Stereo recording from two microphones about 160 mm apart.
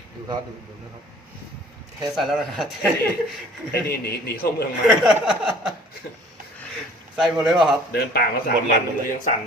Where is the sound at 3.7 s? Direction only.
75° left (ahead or behind).